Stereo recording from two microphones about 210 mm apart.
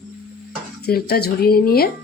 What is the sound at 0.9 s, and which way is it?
Speech, 45° left (ahead or behind).